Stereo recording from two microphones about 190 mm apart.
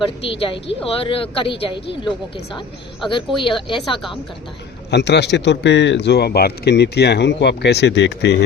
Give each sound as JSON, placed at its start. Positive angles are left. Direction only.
{"t": 0.3, "sound": "speech", "side_deg": 30}
{"t": 3.8, "sound": "a woman's voice", "side_deg": 0}
{"t": 4.9, "sound": "speech", "side_deg": 65}